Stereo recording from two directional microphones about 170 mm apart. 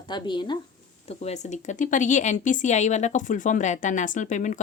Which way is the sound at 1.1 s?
40° left (ahead or behind).